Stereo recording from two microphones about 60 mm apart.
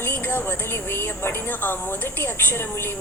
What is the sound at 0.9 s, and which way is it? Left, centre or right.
Speech, left.